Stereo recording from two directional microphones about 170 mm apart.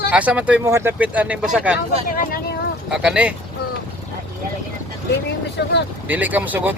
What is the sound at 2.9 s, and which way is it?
Speech, 5° right (ahead or behind).